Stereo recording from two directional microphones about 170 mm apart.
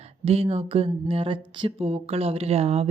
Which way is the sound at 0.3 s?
35° right (ahead or behind).